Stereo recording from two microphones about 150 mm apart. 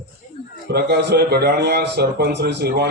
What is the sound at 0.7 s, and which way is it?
A man's voice, 90° right.